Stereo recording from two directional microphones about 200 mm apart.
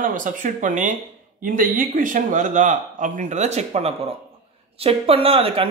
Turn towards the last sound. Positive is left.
turn(degrees=-30)  # may be behind; listen again after turning